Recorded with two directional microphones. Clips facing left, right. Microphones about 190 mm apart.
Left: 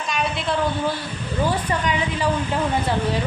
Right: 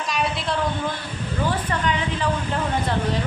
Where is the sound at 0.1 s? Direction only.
Centre (ahead or behind).